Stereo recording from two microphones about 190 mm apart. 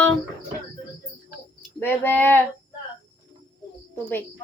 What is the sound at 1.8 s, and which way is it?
Speech, 10° left (ahead or behind).